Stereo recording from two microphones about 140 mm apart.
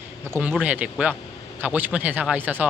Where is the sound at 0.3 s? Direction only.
10° right (ahead or behind).